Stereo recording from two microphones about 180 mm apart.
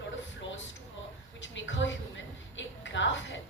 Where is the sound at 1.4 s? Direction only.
90° left.